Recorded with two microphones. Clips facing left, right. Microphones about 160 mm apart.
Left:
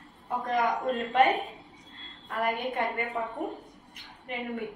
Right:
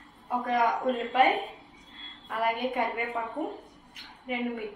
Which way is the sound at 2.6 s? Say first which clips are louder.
Right 2 dB; centre (ahead or behind).